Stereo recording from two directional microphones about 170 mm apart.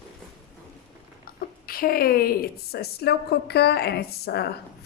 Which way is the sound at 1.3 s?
60° left (ahead or behind).